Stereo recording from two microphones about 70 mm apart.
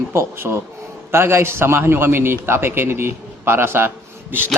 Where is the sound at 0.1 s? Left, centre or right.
Right.